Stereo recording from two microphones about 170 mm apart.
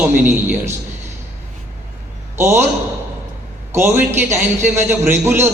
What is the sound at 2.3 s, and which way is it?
Speech, 15° right (ahead or behind).